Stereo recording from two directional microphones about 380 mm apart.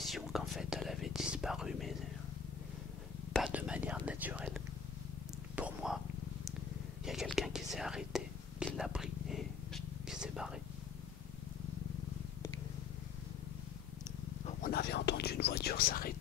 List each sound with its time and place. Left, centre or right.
0.0 s whispering: centre
3.3 s whispering: centre
7.1 s whispering: centre
14.4 s whispering: left